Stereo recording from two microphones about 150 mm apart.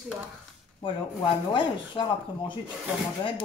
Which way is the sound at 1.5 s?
35° left (ahead or behind).